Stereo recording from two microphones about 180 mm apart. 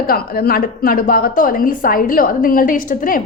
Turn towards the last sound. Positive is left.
turn(degrees=50)  # may be behind; listen again after turning